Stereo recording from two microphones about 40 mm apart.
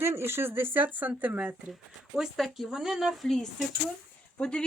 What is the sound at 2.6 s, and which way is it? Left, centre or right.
Speech, centre.